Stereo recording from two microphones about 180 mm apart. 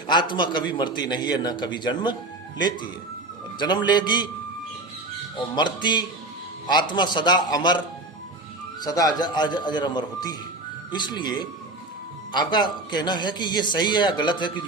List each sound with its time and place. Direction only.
0.1 s a man's voice: 25° left (ahead or behind)
5.5 s a man's voice: 25° left (ahead or behind)
8.8 s a man's voice: 20° left (ahead or behind)